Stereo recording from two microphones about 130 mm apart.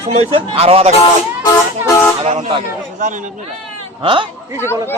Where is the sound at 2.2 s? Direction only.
60° right (ahead or behind).